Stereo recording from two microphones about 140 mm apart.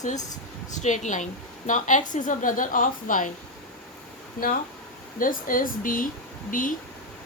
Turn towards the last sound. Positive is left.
turn(degrees=75)  # may be behind; listen again after turning